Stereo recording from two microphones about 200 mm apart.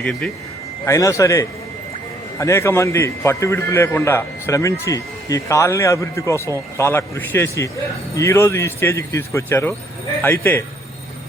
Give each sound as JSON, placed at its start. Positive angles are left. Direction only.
{"t": 0.0, "sound": "a man's voice", "side_deg": 5}
{"t": 0.9, "sound": "a man's voice", "side_deg": 15}